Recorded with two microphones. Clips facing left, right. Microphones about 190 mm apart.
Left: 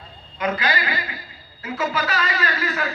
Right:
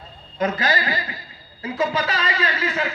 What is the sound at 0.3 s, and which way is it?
A man's voice, 40° right (ahead or behind).